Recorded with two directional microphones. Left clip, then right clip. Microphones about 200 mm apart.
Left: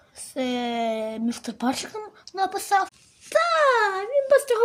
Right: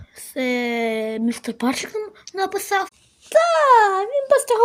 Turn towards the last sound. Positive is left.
turn(degrees=-15)  # may be behind; listen again after turning